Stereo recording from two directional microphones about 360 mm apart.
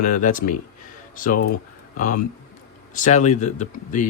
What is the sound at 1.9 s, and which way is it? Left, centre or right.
Speech, left.